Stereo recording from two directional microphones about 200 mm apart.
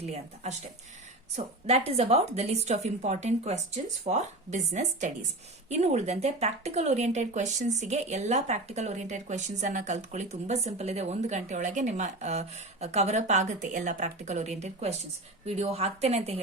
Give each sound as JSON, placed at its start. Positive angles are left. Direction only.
{"t": 0.0, "sound": "speech", "side_deg": -30}
{"t": 1.9, "sound": "speech", "side_deg": -30}